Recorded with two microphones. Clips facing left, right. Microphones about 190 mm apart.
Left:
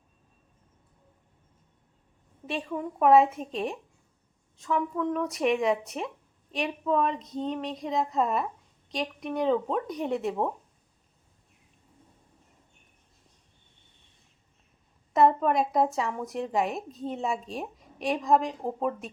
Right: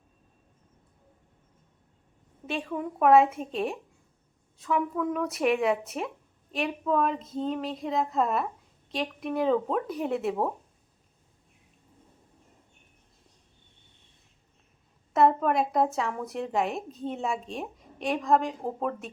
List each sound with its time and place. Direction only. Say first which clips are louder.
2.5 s a woman's voice: even; centre (ahead or behind)
15.1 s a woman's voice: even; centre (ahead or behind)